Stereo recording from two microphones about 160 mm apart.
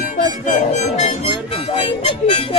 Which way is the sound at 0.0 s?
55° left (ahead or behind).